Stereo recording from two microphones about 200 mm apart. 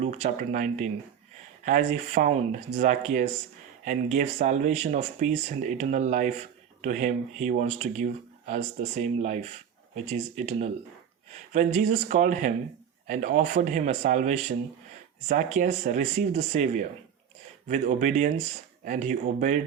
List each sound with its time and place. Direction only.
0.0 s speech: 35° right (ahead or behind)